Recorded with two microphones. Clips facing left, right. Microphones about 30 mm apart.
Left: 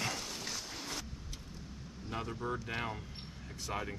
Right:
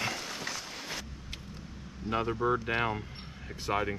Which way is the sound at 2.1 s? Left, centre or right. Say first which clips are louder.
Right 10 dB; right.